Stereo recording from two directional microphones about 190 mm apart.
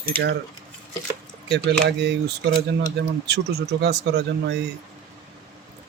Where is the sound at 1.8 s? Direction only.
65° right (ahead or behind).